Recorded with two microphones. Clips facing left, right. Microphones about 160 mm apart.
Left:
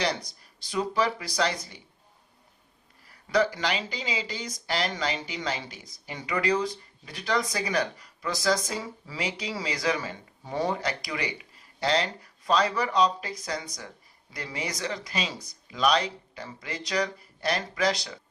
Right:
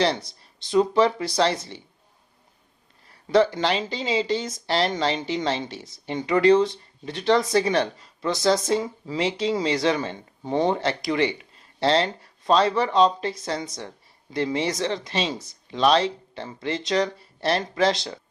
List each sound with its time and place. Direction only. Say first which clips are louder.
0.3 s speech: right 12 dB; 25° right (ahead or behind)
3.1 s speech: right 6 dB; 25° right (ahead or behind)